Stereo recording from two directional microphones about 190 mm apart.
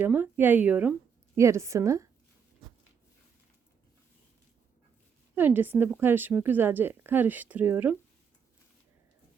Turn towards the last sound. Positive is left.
turn(degrees=-10)  # may be behind; listen again after turning